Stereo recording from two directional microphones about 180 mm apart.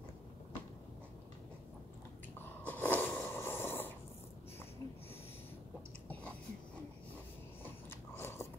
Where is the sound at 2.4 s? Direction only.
10° left (ahead or behind).